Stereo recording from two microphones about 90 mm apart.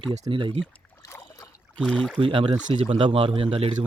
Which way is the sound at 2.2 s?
70° right (ahead or behind).